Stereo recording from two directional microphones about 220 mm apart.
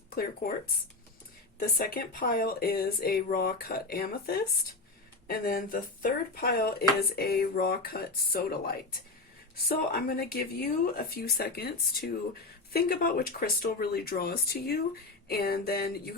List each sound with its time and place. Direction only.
0.1 s speech: 40° left (ahead or behind)
1.5 s a woman's voice: 40° left (ahead or behind)